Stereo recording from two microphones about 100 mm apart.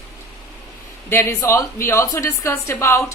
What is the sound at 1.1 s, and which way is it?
A woman's voice, 25° left (ahead or behind).